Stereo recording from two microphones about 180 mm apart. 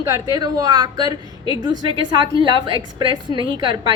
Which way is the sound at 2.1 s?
25° right (ahead or behind).